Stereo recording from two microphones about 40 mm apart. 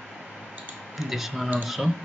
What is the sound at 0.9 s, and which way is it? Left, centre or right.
Speech, centre.